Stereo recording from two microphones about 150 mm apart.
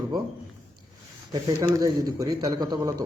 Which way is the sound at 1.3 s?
25° right (ahead or behind).